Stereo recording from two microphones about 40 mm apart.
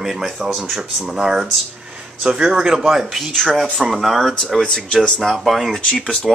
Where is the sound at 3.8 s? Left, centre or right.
Centre.